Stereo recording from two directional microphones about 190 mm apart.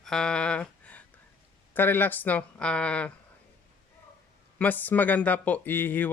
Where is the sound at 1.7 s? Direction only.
10° left (ahead or behind).